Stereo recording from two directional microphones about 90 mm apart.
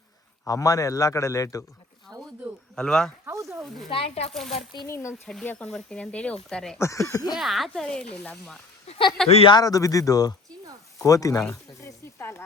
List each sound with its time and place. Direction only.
0.4 s a man's voice: 40° left (ahead or behind)
2.1 s a sound: 40° right (ahead or behind)
2.7 s speech: 5° left (ahead or behind)
3.2 s snake: 35° right (ahead or behind)
3.8 s speech: 90° left
4.3 s speech: 5° left (ahead or behind)
4.9 s a man's voice: 30° left (ahead or behind)
5.5 s speech: 10° left (ahead or behind)
6.7 s a man's voice: 35° left (ahead or behind)
7.3 s speech: centre (ahead or behind)
7.7 s speech: 10° left (ahead or behind)
9.2 s speech: 90° left
9.6 s a man's voice: 40° left (ahead or behind)